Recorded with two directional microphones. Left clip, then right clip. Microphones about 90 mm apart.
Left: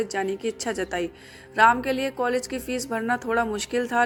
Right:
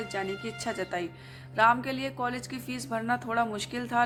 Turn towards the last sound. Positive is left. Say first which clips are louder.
# left 5 dB
turn(degrees=45)  # may be behind; listen again after turning